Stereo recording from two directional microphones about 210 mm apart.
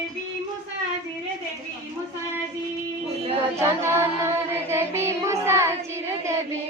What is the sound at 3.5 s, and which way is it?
Child singing, 10° right (ahead or behind).